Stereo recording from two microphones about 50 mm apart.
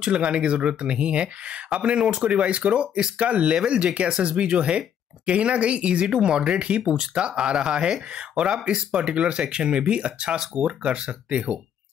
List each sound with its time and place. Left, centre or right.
0.0 s speech: centre